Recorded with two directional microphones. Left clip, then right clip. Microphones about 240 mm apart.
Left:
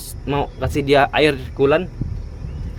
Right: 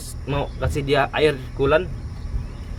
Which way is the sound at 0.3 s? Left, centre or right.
Left.